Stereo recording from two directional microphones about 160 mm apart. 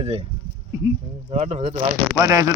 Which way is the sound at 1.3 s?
40° right (ahead or behind).